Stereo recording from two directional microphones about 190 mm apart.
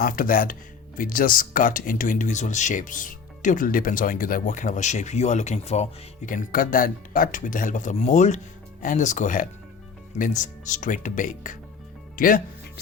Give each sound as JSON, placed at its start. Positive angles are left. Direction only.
{"t": 0.0, "sound": "speech", "side_deg": 50}
{"t": 12.1, "sound": "music", "side_deg": 50}